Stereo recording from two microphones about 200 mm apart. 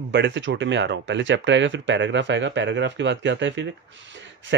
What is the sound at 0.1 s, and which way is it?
Speech, 60° right (ahead or behind).